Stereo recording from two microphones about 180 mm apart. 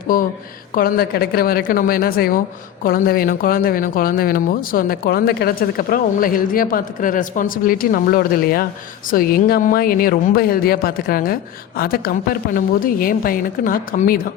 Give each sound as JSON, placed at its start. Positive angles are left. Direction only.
{"t": 0.7, "sound": "speech", "side_deg": 55}